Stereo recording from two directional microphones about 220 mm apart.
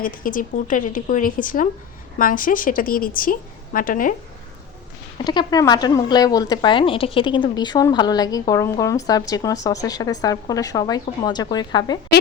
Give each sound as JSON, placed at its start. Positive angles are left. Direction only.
{"t": 0.0, "sound": "a woman's voice", "side_deg": 40}
{"t": 5.1, "sound": "speech", "side_deg": 20}